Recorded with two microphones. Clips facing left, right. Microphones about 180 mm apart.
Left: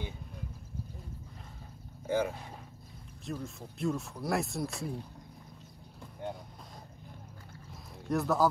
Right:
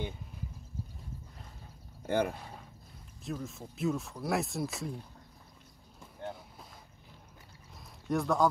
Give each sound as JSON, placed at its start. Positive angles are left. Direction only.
{"t": 2.0, "sound": "speech", "side_deg": -65}
{"t": 3.3, "sound": "speech", "side_deg": 0}
{"t": 6.2, "sound": "vehicle", "side_deg": 10}
{"t": 8.1, "sound": "speech", "side_deg": 5}